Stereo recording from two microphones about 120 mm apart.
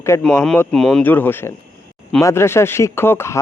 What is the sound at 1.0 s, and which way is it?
Speech, 15° left (ahead or behind).